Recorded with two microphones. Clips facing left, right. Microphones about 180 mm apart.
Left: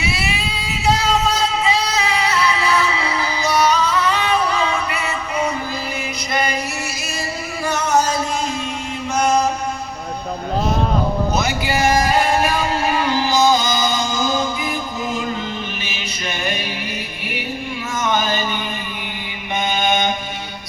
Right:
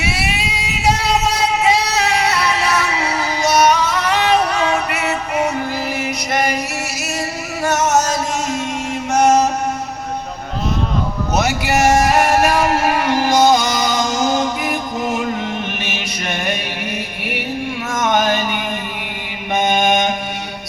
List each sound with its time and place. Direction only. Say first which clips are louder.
0.0 s music: right 2 dB; 75° right (ahead or behind)
7.6 s music: right 2 dB; 75° right (ahead or behind)
12.1 s music: right 3 dB; 75° right (ahead or behind)
18.1 s a sound: right 4 dB; 70° right (ahead or behind)